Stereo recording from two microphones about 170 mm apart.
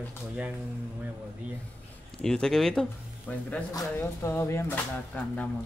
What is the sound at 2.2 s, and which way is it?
Speech, 5° left (ahead or behind).